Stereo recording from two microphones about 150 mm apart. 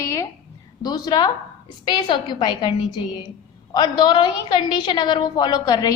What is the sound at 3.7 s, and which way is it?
A woman's voice, 30° left (ahead or behind).